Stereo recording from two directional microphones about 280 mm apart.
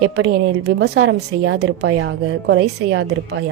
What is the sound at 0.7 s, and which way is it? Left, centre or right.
A woman's voice, right.